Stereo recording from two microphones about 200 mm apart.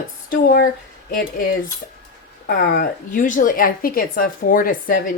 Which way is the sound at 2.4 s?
45° left (ahead or behind).